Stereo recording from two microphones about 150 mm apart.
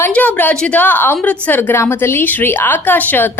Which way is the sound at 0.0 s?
10° left (ahead or behind).